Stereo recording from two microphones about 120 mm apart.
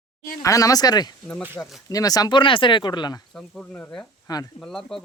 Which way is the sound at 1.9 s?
30° left (ahead or behind).